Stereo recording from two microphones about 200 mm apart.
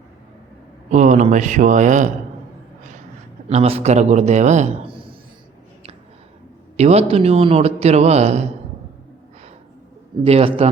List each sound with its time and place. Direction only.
0.9 s a man's voice: 40° right (ahead or behind)
3.5 s a man's voice: 30° right (ahead or behind)
6.7 s a man's voice: 30° right (ahead or behind)
10.2 s a man's voice: 30° right (ahead or behind)